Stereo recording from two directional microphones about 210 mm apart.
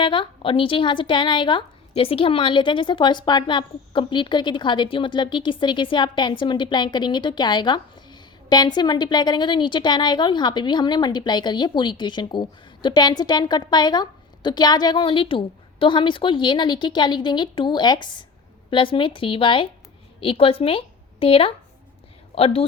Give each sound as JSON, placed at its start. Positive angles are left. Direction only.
{"t": 0.0, "sound": "a woman's voice", "side_deg": 25}